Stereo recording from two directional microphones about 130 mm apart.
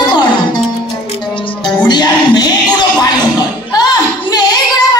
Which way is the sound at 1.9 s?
35° left (ahead or behind).